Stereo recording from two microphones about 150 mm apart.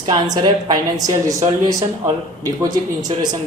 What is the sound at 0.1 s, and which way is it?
A man's voice, 25° right (ahead or behind).